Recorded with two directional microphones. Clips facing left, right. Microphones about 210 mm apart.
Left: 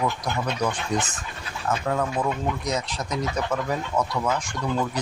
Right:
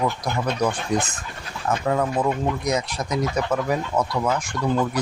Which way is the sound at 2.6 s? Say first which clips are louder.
Right 4 dB; 10° right (ahead or behind).